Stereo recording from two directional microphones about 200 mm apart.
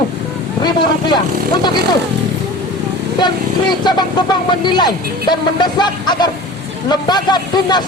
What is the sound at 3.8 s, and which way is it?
A man's voice, 20° left (ahead or behind).